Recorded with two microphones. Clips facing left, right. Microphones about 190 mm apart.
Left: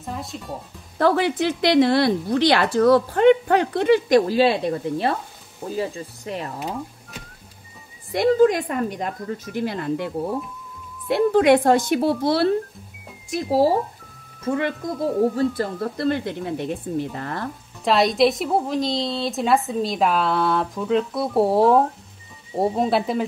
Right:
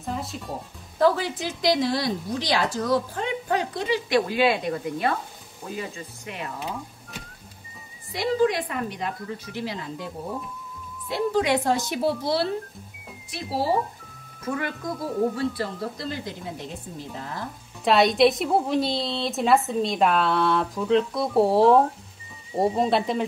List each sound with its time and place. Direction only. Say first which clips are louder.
0.0 s speech: even; centre (ahead or behind)
0.9 s a woman's voice: left 3 dB; 65° left (ahead or behind)
4.3 s speech: left 4 dB; 35° left (ahead or behind)
8.1 s a woman's voice: left 6 dB; 50° left (ahead or behind)
13.3 s speech: left 9 dB; 45° left (ahead or behind)
14.4 s speech: left 6 dB; 25° left (ahead or behind)
15.3 s a woman's voice: left 5 dB; 45° left (ahead or behind); by 17.5 s 65° left (ahead or behind)
17.8 s a woman's voice: left 1 dB; centre (ahead or behind)